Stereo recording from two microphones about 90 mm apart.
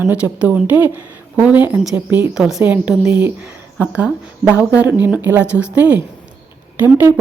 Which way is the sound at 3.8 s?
15° right (ahead or behind).